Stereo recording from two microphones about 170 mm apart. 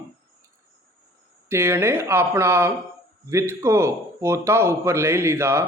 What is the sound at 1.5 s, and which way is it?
A man's voice, 15° right (ahead or behind).